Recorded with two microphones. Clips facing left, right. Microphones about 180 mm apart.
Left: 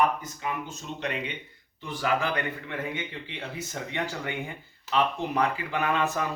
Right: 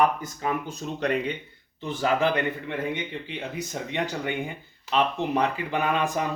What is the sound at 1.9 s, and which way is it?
Speech, 25° right (ahead or behind).